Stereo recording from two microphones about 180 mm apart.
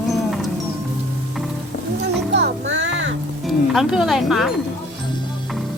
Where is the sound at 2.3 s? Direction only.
85° right.